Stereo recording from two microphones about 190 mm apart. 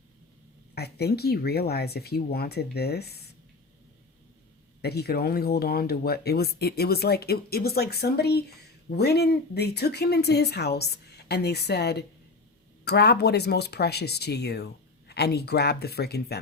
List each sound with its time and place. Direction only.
0.8 s speech: 55° left (ahead or behind)
4.8 s speech: 55° left (ahead or behind)